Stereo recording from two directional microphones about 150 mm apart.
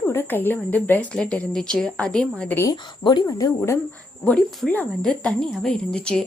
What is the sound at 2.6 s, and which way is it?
Speech, 25° left (ahead or behind).